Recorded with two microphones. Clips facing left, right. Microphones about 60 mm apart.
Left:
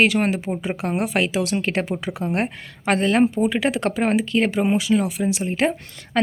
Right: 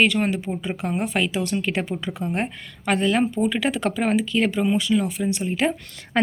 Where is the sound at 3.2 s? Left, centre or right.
Centre.